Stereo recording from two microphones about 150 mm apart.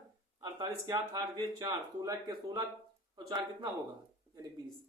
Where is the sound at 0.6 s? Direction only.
25° right (ahead or behind).